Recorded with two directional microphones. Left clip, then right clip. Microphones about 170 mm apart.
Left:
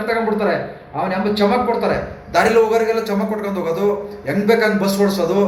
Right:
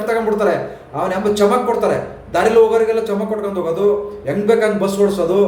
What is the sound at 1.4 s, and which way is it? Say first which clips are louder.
A man's voice: right 2 dB; 15° right (ahead or behind).